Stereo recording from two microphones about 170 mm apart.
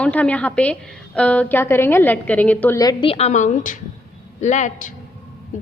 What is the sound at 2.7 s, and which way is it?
A woman's voice, 25° left (ahead or behind).